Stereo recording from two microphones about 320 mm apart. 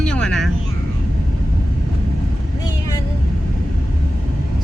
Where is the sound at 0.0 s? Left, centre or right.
Centre.